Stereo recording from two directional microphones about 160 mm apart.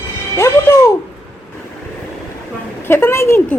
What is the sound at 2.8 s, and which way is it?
Speech, 15° left (ahead or behind).